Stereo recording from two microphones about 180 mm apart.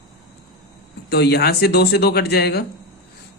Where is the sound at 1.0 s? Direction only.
65° left (ahead or behind).